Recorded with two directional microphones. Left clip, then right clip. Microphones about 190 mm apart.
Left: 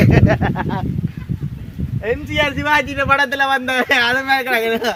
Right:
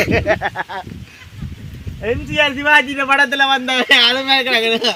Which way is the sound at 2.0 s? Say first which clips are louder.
Right 2 dB; 35° right (ahead or behind).